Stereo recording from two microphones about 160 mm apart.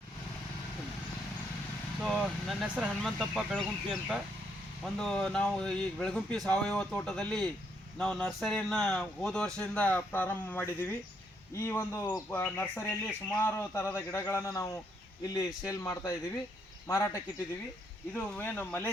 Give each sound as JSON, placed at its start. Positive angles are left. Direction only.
{"t": 2.0, "sound": "a man's voice", "side_deg": 0}